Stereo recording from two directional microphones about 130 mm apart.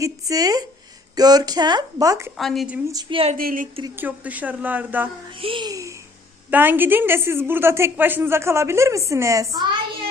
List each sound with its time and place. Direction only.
0.0 s speech: 30° right (ahead or behind)
2.4 s speech: centre (ahead or behind)
2.8 s a woman's voice: 30° right (ahead or behind)
3.1 s speech: 45° right (ahead or behind)
3.3 s a woman's voice: 90° right
3.9 s a woman's voice: 15° right (ahead or behind)
5.4 s speech: 40° right (ahead or behind)
6.5 s a woman's voice: 15° right (ahead or behind)